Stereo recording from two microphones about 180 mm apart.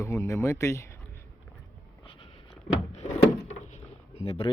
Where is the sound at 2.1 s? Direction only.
30° left (ahead or behind).